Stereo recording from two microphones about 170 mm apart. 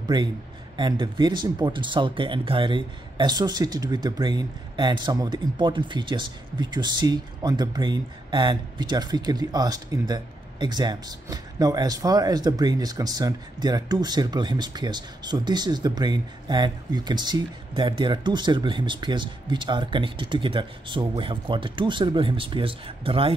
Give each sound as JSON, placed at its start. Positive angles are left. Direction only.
{"t": 0.7, "sound": "speech", "side_deg": -25}